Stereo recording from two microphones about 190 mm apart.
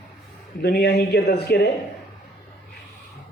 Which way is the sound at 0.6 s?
60° left (ahead or behind).